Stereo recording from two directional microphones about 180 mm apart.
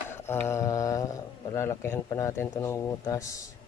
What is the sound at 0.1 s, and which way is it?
Speech, 15° left (ahead or behind).